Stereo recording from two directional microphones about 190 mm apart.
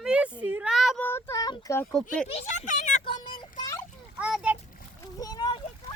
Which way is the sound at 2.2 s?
35° left (ahead or behind).